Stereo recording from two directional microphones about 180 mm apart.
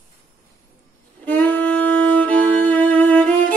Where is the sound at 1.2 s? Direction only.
10° left (ahead or behind).